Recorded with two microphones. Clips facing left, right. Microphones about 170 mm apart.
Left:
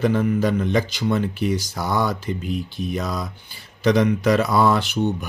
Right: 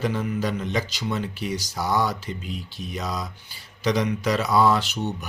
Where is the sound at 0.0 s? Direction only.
55° left (ahead or behind).